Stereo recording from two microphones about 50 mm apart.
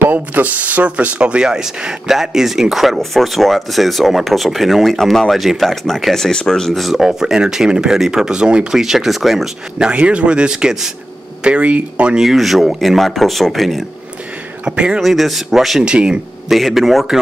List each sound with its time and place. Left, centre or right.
0.1 s speech: right; by 7.0 s centre
7.0 s speech: centre
9.8 s speech: right
11.4 s speech: right
12.2 s speech: centre
14.6 s speech: centre
15.0 s speech: centre
15.8 s speech: centre
16.4 s speech: centre